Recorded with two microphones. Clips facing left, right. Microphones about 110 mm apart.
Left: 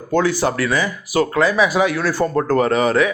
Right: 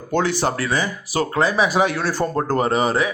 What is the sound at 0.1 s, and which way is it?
Speech, 25° right (ahead or behind).